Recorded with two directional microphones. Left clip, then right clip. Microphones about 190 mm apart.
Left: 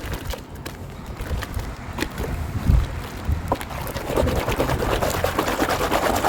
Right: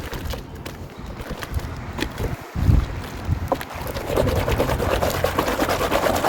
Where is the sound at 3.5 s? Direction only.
20° left (ahead or behind).